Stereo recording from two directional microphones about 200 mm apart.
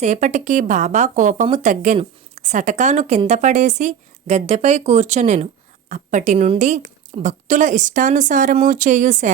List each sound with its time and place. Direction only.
0.0 s a woman's voice: 35° right (ahead or behind)